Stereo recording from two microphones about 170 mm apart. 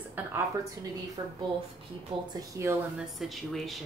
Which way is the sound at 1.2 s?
25° right (ahead or behind).